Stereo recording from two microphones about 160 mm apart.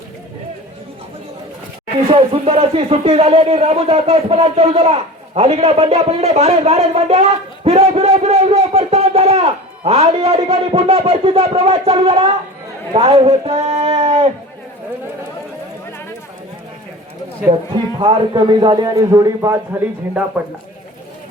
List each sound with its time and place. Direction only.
2.1 s a man's voice: 35° right (ahead or behind)
18.0 s a man's voice: 30° right (ahead or behind)